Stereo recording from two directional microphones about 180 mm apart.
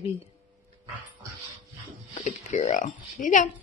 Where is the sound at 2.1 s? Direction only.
40° left (ahead or behind).